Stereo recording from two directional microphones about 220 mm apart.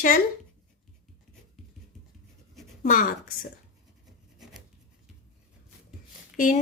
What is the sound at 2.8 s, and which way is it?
Speech, 40° left (ahead or behind).